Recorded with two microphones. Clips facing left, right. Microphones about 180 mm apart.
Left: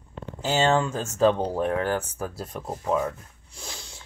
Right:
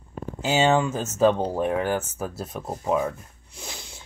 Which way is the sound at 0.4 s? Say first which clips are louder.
Right 2 dB; 10° right (ahead or behind).